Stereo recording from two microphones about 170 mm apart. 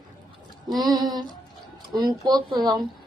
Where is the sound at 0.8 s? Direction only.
25° right (ahead or behind).